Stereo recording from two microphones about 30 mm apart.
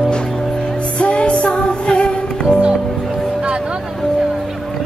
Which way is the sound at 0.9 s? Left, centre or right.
Left.